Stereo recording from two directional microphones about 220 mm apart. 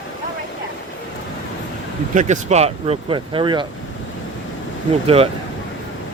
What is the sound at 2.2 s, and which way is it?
Speech, 35° right (ahead or behind).